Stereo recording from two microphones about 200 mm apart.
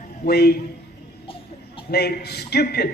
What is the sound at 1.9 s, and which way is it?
Speech, 55° left (ahead or behind).